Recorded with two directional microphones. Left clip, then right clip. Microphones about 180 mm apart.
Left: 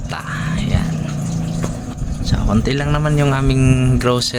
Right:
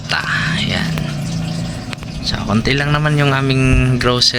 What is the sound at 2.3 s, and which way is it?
Speech, 5° left (ahead or behind).